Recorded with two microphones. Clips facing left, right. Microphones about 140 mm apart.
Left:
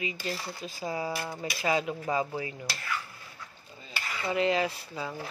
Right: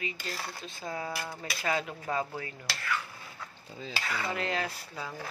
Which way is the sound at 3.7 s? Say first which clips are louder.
Right 4 dB; 90° right.